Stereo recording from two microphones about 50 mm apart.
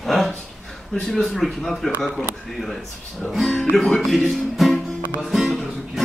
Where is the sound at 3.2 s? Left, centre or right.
Left.